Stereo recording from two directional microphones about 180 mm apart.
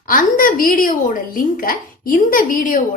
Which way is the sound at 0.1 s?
50° left (ahead or behind).